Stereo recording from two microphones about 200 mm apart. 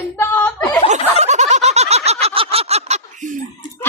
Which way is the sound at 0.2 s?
10° left (ahead or behind).